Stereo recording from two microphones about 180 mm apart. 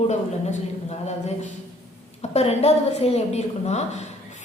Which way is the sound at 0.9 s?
40° left (ahead or behind).